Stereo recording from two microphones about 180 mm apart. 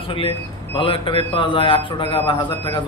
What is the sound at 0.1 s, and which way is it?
A man's voice, 30° left (ahead or behind).